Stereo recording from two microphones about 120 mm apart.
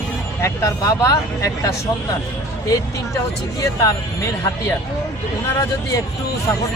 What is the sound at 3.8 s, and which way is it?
Speech, 25° left (ahead or behind).